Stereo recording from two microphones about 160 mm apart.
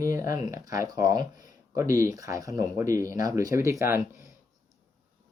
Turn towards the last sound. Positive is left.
turn(degrees=-15)  # may be behind; listen again after turning